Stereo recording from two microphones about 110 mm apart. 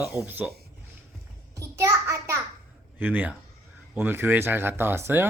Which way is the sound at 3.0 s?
15° right (ahead or behind).